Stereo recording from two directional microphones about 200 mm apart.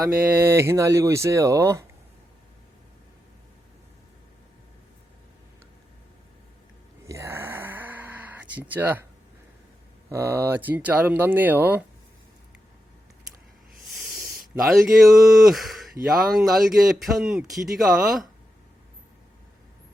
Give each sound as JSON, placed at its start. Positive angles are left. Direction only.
{"t": 0.0, "sound": "speech", "side_deg": -10}
{"t": 7.0, "sound": "a sound", "side_deg": -15}
{"t": 8.6, "sound": "speech", "side_deg": -10}
{"t": 10.1, "sound": "speech", "side_deg": -15}
{"t": 14.5, "sound": "speech", "side_deg": -10}